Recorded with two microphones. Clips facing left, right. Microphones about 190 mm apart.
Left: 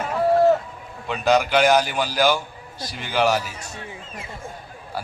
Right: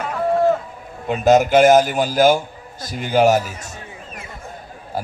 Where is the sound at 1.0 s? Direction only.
45° right (ahead or behind).